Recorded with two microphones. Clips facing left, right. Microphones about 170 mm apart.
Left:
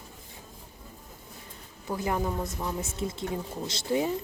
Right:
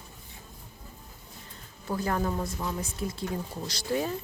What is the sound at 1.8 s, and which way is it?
A woman's voice, 15° left (ahead or behind).